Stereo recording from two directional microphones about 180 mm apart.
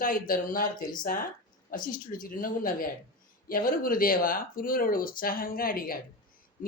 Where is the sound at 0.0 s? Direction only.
50° left (ahead or behind).